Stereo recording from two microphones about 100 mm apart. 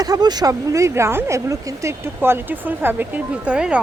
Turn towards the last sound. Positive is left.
turn(degrees=-10)  # may be behind; listen again after turning